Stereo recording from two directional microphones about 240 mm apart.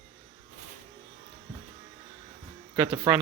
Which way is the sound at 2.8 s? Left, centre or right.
Centre.